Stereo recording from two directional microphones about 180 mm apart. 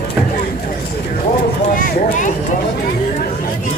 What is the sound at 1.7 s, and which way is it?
Speech, 50° left (ahead or behind).